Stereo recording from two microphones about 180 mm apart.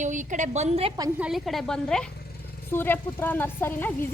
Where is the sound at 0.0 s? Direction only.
45° right (ahead or behind).